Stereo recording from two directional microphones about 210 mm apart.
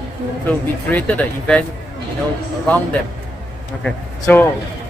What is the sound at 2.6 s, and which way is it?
A man's voice, 5° left (ahead or behind).